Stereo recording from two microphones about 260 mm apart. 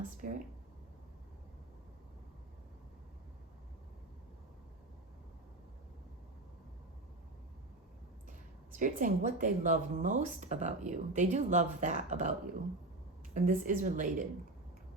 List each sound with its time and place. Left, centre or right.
0.2 s speech: right
8.7 s speech: right
13.3 s speech: right